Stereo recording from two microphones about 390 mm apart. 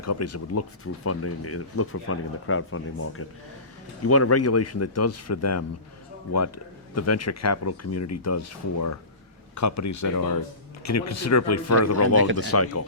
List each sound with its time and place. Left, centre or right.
0.0 s speech: left